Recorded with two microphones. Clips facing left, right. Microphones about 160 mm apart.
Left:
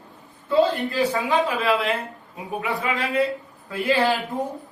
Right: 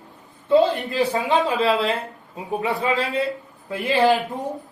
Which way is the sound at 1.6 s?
30° right (ahead or behind).